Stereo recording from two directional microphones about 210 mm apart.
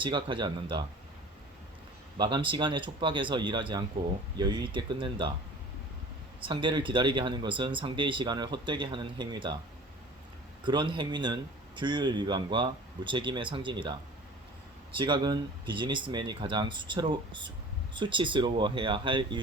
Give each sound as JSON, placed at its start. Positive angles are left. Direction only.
{"t": 0.0, "sound": "speech", "side_deg": -25}
{"t": 2.1, "sound": "speech", "side_deg": -20}
{"t": 6.4, "sound": "speech", "side_deg": -25}
{"t": 10.6, "sound": "speech", "side_deg": -20}
{"t": 14.9, "sound": "speech", "side_deg": -20}